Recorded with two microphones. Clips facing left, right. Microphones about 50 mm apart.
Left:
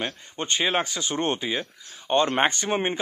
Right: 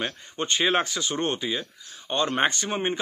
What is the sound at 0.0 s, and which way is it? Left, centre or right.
Speech, centre.